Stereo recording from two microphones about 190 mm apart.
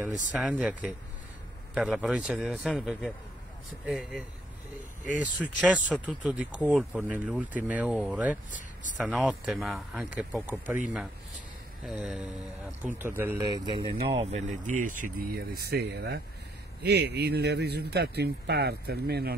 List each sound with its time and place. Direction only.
0.4 s speech: 5° right (ahead or behind)
1.8 s speech: 5° right (ahead or behind)
5.2 s speech: 5° right (ahead or behind)
11.8 s speech: 5° right (ahead or behind); by 19.3 s 55° right (ahead or behind)